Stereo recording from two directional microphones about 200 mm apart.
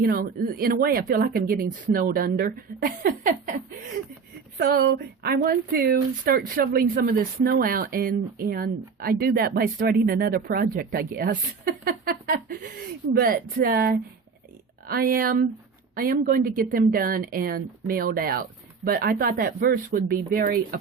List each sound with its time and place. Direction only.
0.0 s speech: 50° right (ahead or behind)
4.5 s speech: 50° right (ahead or behind)